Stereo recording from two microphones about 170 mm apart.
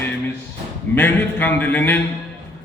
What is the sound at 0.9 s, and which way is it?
A man's voice, 10° left (ahead or behind).